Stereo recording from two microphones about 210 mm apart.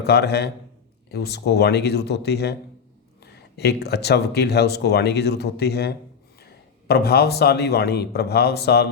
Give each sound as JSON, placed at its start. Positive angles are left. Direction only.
{"t": 0.0, "sound": "a man's voice", "side_deg": 50}